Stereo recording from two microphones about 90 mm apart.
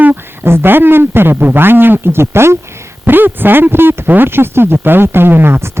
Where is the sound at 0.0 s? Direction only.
25° right (ahead or behind).